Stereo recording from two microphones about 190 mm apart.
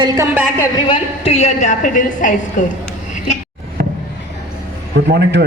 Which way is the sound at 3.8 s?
55° right (ahead or behind).